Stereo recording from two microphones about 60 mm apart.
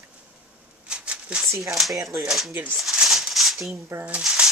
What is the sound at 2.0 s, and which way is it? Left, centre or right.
Speech, right.